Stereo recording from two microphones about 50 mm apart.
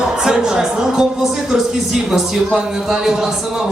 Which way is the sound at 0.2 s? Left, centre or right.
Centre.